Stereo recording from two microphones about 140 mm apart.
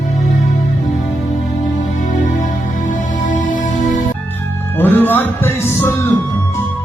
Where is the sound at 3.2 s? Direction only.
70° left (ahead or behind).